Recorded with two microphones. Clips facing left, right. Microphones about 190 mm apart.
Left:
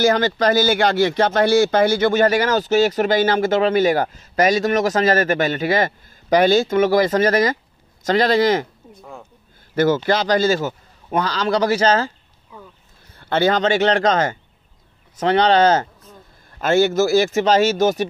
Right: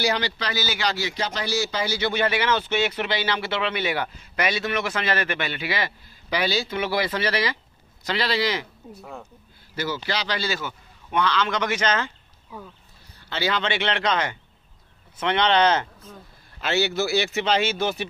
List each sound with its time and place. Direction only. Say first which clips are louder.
0.0 s speech: left 9 dB; 50° left (ahead or behind)
8.9 s speech: left 1 dB; 5° right (ahead or behind)
9.8 s a man's voice: left 11 dB; 50° left (ahead or behind)
13.2 s a man's voice: left 9 dB; 50° left (ahead or behind)